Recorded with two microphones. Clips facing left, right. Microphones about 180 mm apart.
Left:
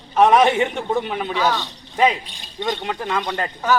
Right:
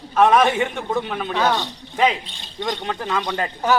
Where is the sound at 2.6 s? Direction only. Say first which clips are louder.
Left 1 dB; 15° left (ahead or behind).